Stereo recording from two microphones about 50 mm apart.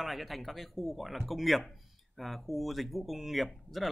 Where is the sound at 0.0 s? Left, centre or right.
Centre.